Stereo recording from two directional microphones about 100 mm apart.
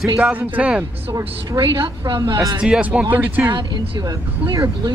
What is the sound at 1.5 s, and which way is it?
Speech, 55° right (ahead or behind).